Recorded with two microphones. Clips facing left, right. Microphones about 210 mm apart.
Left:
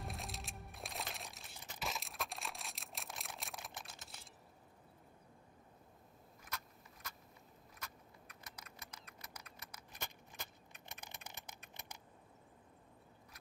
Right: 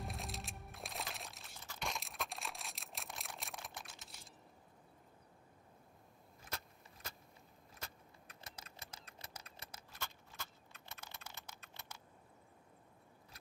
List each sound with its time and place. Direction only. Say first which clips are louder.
0.0 s music: right 1 dB; centre (ahead or behind)
1.8 s single-lens reflex camera: even; centre (ahead or behind)
6.4 s vehicle: right 1 dB; 25° right (ahead or behind)
7.8 s typing: right 1 dB; 30° right (ahead or behind)
9.9 s a sound: even; 15° left (ahead or behind)